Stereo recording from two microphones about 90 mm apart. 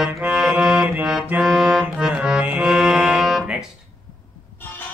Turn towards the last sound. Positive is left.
turn(degrees=-5)  # may be behind; listen again after turning